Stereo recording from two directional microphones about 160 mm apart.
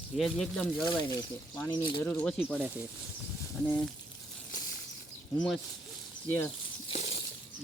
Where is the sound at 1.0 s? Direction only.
25° left (ahead or behind).